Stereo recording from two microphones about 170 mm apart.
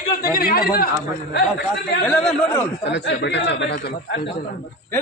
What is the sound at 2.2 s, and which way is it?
Speech, 10° left (ahead or behind).